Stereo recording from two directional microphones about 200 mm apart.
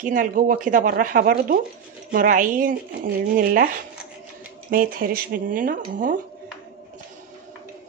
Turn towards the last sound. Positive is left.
turn(degrees=-40)  # may be behind; listen again after turning